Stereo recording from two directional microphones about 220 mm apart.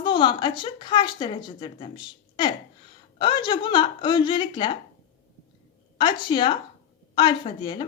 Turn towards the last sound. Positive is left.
turn(degrees=20)  # may be behind; listen again after turning